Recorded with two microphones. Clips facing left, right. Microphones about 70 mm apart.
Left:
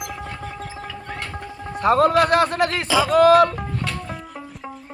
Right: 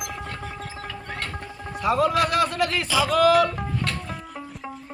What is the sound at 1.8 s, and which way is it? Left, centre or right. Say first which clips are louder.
Speech: left 5 dB; left.